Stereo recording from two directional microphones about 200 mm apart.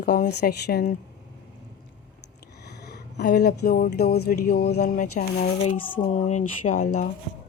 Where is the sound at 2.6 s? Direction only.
55° left (ahead or behind).